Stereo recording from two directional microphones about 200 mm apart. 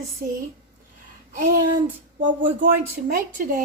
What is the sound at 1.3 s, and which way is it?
A woman's voice, 40° right (ahead or behind).